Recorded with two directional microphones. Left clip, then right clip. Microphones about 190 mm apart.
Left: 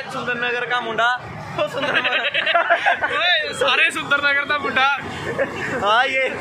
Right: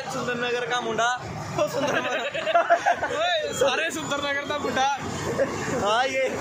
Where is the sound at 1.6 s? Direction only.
10° right (ahead or behind).